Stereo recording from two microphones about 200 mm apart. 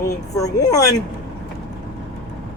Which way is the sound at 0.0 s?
15° left (ahead or behind).